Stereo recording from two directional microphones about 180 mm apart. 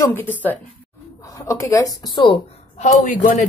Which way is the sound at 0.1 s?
10° left (ahead or behind).